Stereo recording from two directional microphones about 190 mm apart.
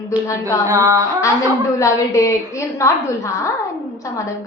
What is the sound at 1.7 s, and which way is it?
A woman's voice, 15° left (ahead or behind).